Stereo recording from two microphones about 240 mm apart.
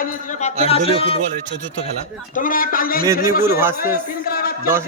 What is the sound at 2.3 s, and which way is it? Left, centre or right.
Speech, left.